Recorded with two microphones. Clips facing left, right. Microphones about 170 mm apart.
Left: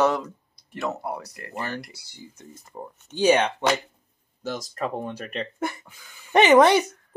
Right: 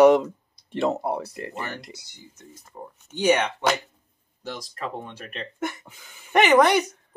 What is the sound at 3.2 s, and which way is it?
Speech, 30° left (ahead or behind).